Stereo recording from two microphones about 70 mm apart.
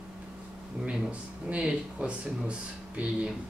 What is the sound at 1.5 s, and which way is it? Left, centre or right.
Speech, centre.